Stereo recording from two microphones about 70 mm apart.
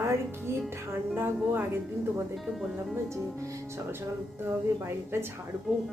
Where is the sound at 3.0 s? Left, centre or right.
Right.